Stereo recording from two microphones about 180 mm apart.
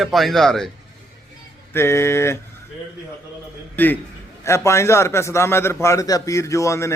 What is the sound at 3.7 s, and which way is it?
A man's voice, 10° left (ahead or behind).